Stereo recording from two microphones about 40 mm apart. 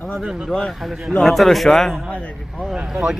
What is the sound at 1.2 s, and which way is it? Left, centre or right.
Speech, centre.